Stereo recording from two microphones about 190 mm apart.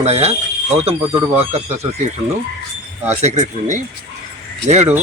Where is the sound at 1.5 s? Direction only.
35° right (ahead or behind).